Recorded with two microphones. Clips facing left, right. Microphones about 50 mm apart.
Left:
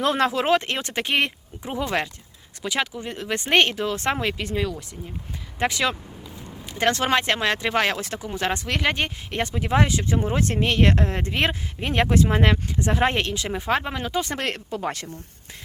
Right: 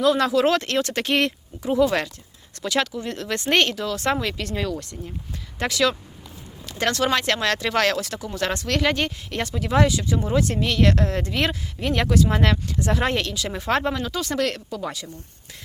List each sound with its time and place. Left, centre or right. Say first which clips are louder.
0.0 s speech: right 3 dB; left
4.5 s speech: even; centre
5.5 s speech: right 1 dB; left
13.7 s speech: right 2 dB; centre
13.9 s speech: right 1 dB; left